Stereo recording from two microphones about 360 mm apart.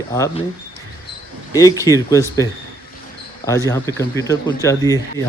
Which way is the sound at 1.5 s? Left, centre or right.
Centre.